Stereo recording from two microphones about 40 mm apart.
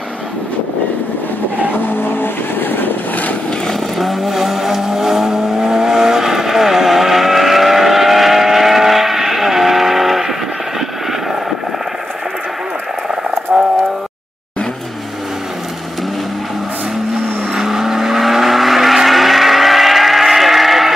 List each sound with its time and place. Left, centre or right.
1.8 s vehicle: left
4.0 s vehicle: centre
13.5 s clip-clop: centre
17.6 s vehicle: centre